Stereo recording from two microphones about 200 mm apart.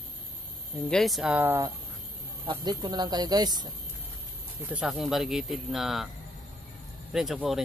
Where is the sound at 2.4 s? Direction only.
20° right (ahead or behind).